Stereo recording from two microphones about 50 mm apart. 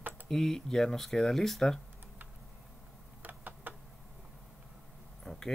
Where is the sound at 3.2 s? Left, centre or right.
Right.